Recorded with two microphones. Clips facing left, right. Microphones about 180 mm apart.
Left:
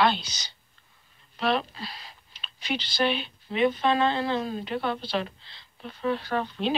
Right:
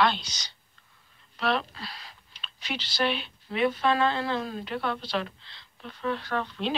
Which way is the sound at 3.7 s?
25° left (ahead or behind).